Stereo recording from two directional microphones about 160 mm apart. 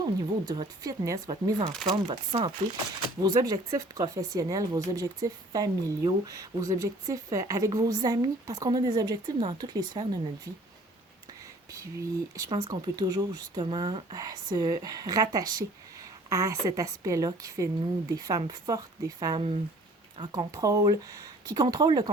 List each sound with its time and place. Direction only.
0.0 s speech: 25° right (ahead or behind)
11.7 s speech: 20° right (ahead or behind)